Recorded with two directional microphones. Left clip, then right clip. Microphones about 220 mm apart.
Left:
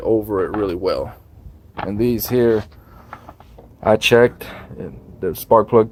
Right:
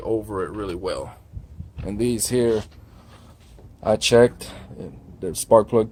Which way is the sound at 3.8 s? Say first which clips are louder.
Left 4 dB; 20° left (ahead or behind).